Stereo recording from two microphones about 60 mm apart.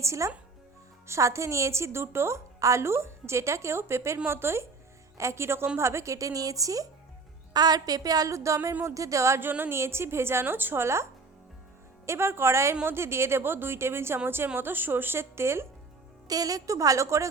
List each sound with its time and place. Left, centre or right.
0.0 s a woman's voice: right
2.6 s a woman's voice: right
5.1 s a woman's voice: right
7.5 s a woman's voice: right
9.4 s a woman's voice: right
10.4 s a woman's voice: right
10.8 s a woman's voice: right
16.2 s a woman's voice: right